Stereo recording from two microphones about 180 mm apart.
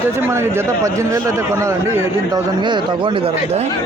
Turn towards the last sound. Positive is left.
turn(degrees=-30)  # may be behind; listen again after turning